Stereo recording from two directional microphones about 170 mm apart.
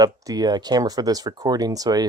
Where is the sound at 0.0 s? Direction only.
20° right (ahead or behind).